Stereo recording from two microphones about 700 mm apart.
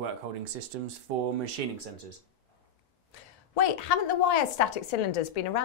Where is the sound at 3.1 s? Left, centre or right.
Left.